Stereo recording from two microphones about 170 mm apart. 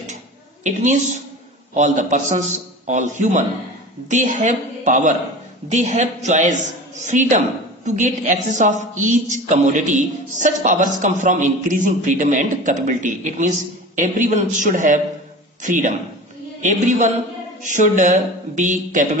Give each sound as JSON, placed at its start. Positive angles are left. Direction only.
{"t": 0.7, "sound": "a woman's voice", "side_deg": -45}